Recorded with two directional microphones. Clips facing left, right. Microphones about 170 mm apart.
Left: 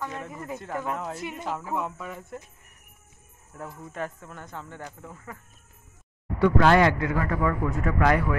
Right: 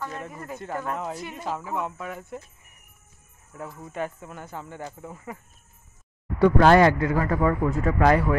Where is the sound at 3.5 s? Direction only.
5° right (ahead or behind).